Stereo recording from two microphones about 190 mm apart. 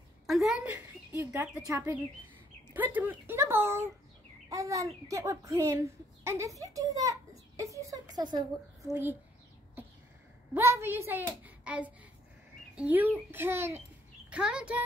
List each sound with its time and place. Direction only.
0.3 s a child's voice: centre (ahead or behind)
10.5 s a child's voice: 15° right (ahead or behind)